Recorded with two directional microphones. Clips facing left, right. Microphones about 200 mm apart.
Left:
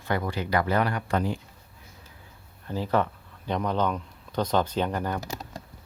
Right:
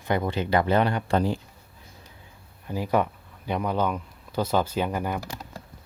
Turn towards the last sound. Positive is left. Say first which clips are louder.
# right 1 dB
turn(degrees=-10)  # may be behind; listen again after turning